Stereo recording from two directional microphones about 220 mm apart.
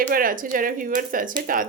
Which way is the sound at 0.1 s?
40° right (ahead or behind).